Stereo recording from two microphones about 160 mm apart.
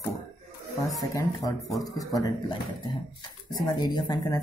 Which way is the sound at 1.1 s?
20° left (ahead or behind).